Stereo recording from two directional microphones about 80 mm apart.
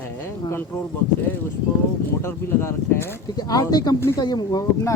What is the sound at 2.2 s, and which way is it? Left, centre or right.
Speech, left.